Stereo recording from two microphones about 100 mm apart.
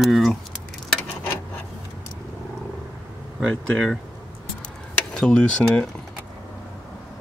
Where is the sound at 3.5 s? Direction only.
5° left (ahead or behind).